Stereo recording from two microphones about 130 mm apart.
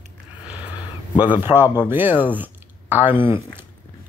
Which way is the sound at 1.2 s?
15° right (ahead or behind).